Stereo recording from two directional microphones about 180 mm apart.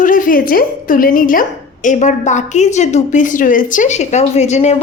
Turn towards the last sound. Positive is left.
turn(degrees=40)  # may be behind; listen again after turning